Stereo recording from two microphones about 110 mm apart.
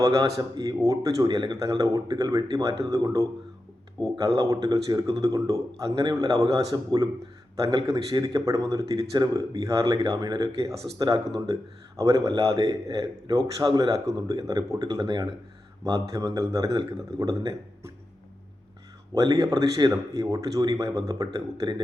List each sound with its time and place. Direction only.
0.5 s a man's voice: 35° right (ahead or behind)
7.8 s a man's voice: 45° right (ahead or behind)
15.8 s a man's voice: 30° right (ahead or behind)
19.1 s a man's voice: 35° right (ahead or behind)